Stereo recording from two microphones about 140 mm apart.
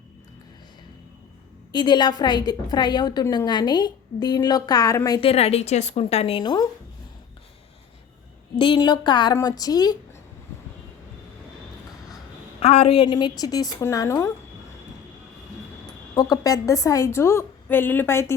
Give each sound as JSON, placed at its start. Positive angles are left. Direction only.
{"t": 1.7, "sound": "a woman's voice", "side_deg": 30}
{"t": 5.2, "sound": "a woman's voice", "side_deg": 45}
{"t": 6.4, "sound": "a woman's voice", "side_deg": 30}
{"t": 8.5, "sound": "a woman's voice", "side_deg": 35}
{"t": 12.5, "sound": "a woman's voice", "side_deg": 45}
{"t": 16.1, "sound": "a woman's voice", "side_deg": 25}